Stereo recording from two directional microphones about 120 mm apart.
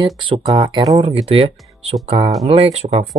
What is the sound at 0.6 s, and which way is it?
Speech, 40° right (ahead or behind).